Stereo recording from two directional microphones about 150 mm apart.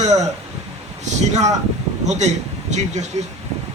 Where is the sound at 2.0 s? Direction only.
50° right (ahead or behind).